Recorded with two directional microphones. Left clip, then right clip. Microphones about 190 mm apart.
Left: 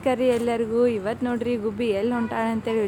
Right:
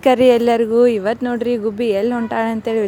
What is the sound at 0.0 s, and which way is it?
Speech, 45° right (ahead or behind).